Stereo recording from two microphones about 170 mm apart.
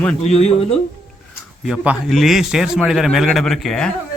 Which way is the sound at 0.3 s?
35° left (ahead or behind).